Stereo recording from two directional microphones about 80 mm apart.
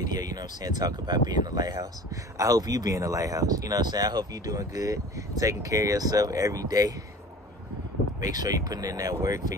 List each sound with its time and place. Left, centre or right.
0.0 s speech: right
8.2 s speech: right